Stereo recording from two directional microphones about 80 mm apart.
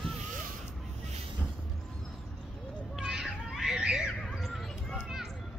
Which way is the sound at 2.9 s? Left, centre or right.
Centre.